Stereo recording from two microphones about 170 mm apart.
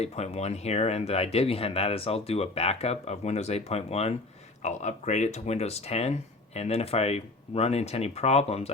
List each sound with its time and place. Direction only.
0.0 s speech: 40° left (ahead or behind)